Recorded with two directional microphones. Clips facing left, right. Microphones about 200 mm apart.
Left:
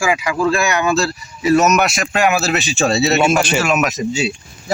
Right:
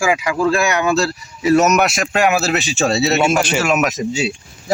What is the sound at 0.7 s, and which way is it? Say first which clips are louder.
Speech: even; 55° right (ahead or behind).